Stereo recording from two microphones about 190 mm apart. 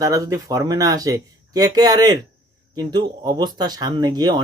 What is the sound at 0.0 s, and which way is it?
Speech, 20° right (ahead or behind).